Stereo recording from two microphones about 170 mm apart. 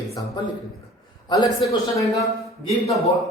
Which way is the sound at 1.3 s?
20° left (ahead or behind).